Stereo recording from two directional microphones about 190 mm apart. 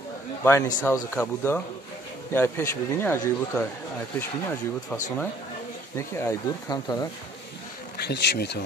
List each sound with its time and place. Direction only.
0.4 s speech: 15° left (ahead or behind)
8.0 s speech: 60° left (ahead or behind)